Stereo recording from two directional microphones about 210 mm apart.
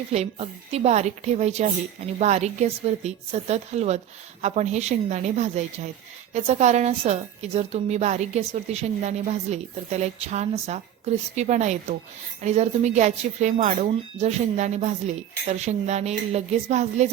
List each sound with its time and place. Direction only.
0.1 s a woman's voice: 30° right (ahead or behind)